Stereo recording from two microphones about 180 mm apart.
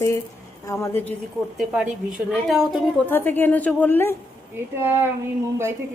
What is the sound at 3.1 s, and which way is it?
A woman's voice, 10° left (ahead or behind).